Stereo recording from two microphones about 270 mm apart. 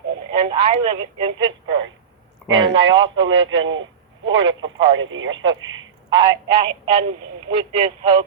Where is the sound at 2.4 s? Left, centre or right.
Centre.